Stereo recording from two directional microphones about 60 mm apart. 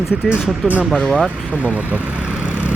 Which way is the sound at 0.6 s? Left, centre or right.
Centre.